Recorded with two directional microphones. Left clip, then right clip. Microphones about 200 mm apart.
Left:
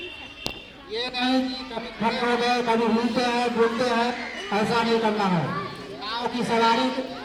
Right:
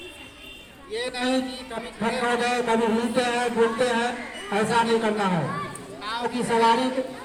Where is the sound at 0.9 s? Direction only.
Centre (ahead or behind).